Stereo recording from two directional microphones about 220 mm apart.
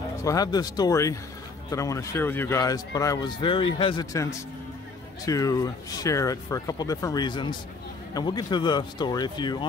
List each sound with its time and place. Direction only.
0.2 s a man's voice: 15° left (ahead or behind)